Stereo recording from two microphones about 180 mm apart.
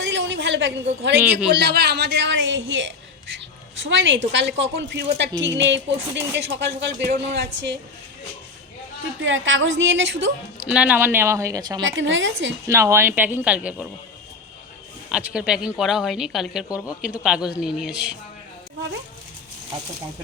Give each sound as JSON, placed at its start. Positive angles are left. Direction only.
{"t": 0.0, "sound": "a sound", "side_deg": -90}
{"t": 1.5, "sound": "speech", "side_deg": -65}
{"t": 5.1, "sound": "a woman's voice", "side_deg": -85}
{"t": 9.2, "sound": "a woman's voice", "side_deg": -90}
{"t": 10.6, "sound": "a woman's voice", "side_deg": -5}
{"t": 11.8, "sound": "a woman's voice", "side_deg": -90}
{"t": 12.6, "sound": "a woman's voice", "side_deg": -15}
{"t": 15.1, "sound": "speech", "side_deg": -5}